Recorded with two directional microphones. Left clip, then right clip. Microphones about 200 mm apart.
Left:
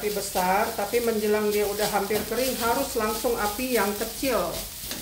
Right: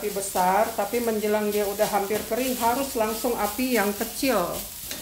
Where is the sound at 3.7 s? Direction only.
45° right (ahead or behind).